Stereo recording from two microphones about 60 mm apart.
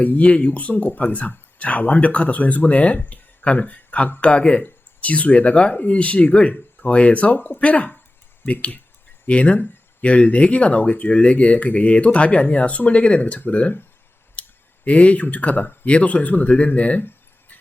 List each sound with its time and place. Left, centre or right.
0.0 s speech: left
9.2 s speech: left
14.4 s clicking: left
14.8 s speech: left
15.9 s speech: left